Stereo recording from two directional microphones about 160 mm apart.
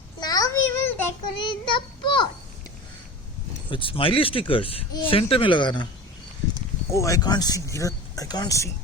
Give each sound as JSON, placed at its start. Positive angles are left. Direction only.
{"t": 0.2, "sound": "child singing", "side_deg": 25}
{"t": 1.4, "sound": "child singing", "side_deg": 30}
{"t": 3.7, "sound": "speech", "side_deg": 35}
{"t": 6.9, "sound": "speech", "side_deg": 20}